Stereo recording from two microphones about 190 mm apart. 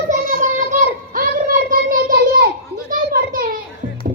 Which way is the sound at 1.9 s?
50° right (ahead or behind).